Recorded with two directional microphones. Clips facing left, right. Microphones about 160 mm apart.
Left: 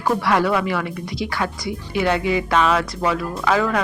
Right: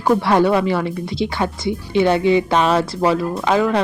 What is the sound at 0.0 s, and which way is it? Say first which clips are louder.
Speech: right 4 dB; 25° right (ahead or behind).